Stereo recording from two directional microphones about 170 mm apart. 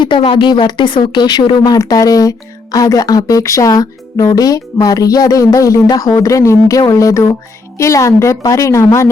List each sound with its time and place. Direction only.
0.0 s a woman's voice: 30° left (ahead or behind)